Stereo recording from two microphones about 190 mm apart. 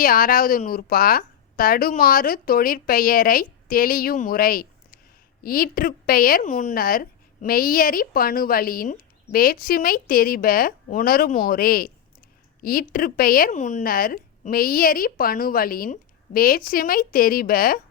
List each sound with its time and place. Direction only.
0.0 s a woman's voice: 50° left (ahead or behind)